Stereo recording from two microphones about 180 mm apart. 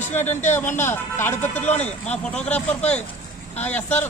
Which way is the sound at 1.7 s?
40° left (ahead or behind).